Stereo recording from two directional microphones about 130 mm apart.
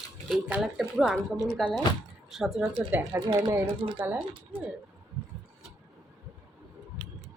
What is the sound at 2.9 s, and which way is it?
Speech, 20° right (ahead or behind).